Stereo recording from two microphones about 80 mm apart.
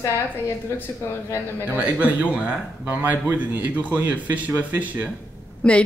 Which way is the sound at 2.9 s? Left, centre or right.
Right.